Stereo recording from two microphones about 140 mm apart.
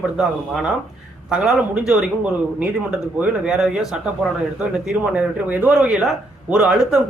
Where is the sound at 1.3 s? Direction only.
5° right (ahead or behind).